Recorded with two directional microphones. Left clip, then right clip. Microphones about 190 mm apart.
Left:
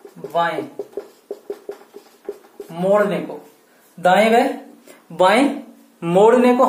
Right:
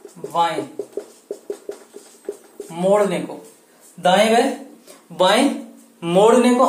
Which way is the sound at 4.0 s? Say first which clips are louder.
Left 1 dB; 30° left (ahead or behind).